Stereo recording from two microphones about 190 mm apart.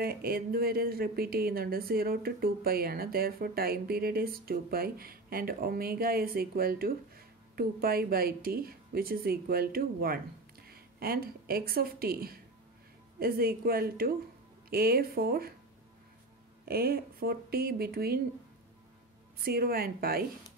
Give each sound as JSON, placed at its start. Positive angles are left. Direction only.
{"t": 0.0, "sound": "a woman's voice", "side_deg": -50}
{"t": 16.6, "sound": "speech", "side_deg": -55}
{"t": 19.4, "sound": "speech", "side_deg": -50}